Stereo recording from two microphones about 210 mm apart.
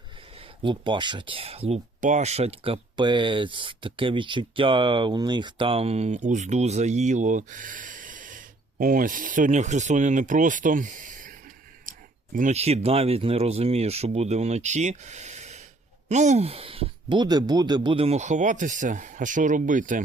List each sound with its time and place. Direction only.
0.3 s speech: 25° right (ahead or behind); by 20.0 s 40° right (ahead or behind)